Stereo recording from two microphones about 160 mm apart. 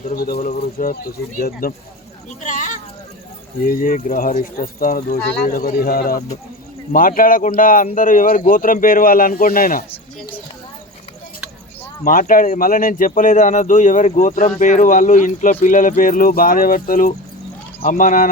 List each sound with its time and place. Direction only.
0.1 s speech: 70° left (ahead or behind)
0.3 s speech: 55° left (ahead or behind)
2.4 s a sound: 50° left (ahead or behind)
3.7 s a man's voice: 60° left (ahead or behind)
12.0 s a man's voice: 55° left (ahead or behind)